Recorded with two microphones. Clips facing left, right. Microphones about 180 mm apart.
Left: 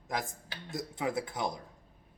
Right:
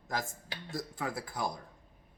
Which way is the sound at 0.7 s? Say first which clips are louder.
Left 3 dB; 20° left (ahead or behind).